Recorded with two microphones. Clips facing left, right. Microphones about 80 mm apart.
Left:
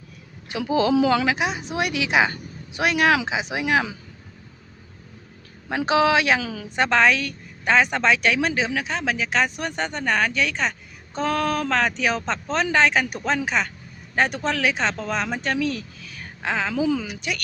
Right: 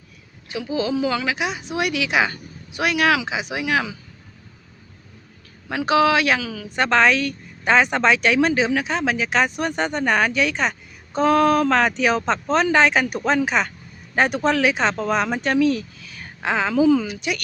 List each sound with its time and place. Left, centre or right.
0.5 s speech: left
1.4 s a woman's voice: left
5.7 s a woman's voice: left
6.7 s a woman's voice: centre
16.8 s a woman's voice: centre